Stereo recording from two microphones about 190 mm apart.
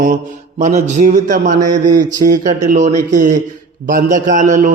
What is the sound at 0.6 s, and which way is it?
Speech, 40° right (ahead or behind).